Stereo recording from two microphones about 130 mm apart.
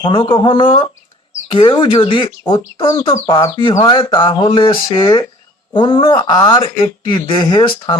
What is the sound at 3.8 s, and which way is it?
Speech, 40° left (ahead or behind).